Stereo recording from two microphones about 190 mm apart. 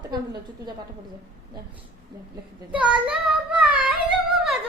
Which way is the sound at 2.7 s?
5° right (ahead or behind).